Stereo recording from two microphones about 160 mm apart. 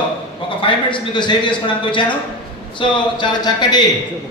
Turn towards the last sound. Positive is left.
turn(degrees=25)  # may be behind; listen again after turning